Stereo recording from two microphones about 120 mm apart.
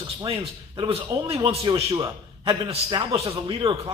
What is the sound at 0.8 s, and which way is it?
Speech, 45° right (ahead or behind).